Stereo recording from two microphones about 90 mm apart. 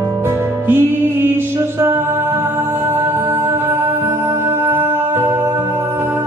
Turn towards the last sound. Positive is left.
turn(degrees=-25)  # may be behind; listen again after turning